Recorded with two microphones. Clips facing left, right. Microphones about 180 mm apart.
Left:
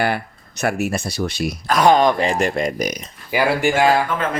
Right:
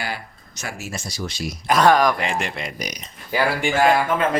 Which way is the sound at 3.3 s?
10° left (ahead or behind).